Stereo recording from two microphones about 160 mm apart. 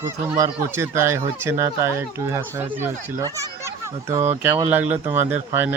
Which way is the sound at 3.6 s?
15° right (ahead or behind).